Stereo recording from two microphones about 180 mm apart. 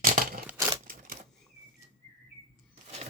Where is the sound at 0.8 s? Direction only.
50° right (ahead or behind).